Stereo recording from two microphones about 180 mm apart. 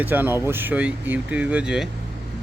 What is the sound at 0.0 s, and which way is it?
Speech, 10° right (ahead or behind).